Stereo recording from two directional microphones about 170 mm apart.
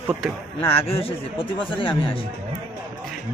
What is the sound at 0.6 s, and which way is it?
A man's voice, 35° left (ahead or behind).